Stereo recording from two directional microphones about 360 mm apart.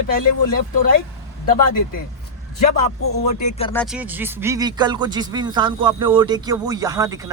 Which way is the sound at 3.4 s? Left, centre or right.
Centre.